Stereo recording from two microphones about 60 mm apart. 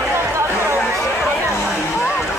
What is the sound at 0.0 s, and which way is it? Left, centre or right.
Chatter, right.